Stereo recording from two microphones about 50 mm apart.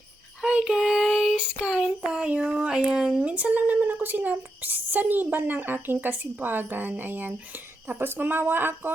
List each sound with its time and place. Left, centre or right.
0.4 s child singing: centre
1.4 s child singing: centre
2.1 s speech: centre
3.2 s speech: right
3.6 s a woman's voice: right